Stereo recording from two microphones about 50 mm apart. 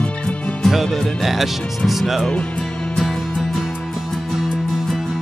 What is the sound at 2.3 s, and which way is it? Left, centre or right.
Speech, left.